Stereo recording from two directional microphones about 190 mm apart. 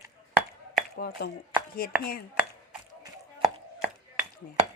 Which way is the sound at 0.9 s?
55° left (ahead or behind).